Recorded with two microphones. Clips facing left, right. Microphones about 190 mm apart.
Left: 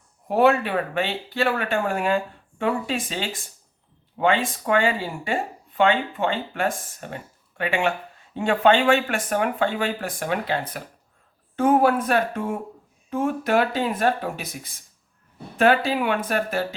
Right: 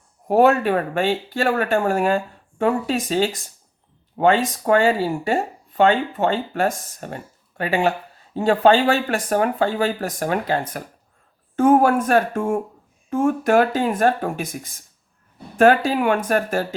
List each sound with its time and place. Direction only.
0.3 s speech: 45° right (ahead or behind)